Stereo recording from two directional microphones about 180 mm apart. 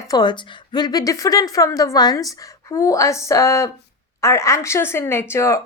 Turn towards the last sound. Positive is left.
turn(degrees=15)  # may be behind; listen again after turning